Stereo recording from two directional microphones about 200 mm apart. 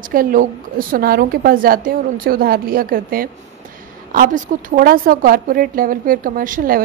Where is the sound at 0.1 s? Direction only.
45° right (ahead or behind).